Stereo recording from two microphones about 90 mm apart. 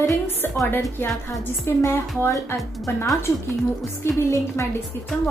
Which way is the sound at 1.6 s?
25° left (ahead or behind).